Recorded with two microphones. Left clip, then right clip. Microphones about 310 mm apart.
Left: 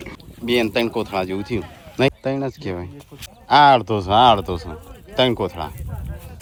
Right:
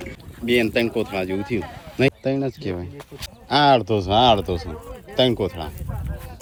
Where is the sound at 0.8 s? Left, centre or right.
Centre.